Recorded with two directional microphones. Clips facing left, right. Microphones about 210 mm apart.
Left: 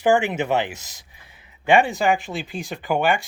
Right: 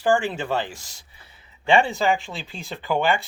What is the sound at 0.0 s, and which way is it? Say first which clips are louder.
Speech: left 3 dB; 20° left (ahead or behind).